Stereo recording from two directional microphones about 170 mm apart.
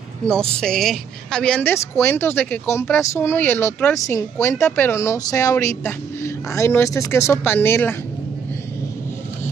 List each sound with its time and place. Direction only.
0.3 s a woman's voice: 5° left (ahead or behind)